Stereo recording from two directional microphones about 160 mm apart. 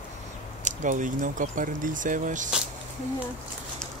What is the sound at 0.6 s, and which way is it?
Speech, 55° right (ahead or behind).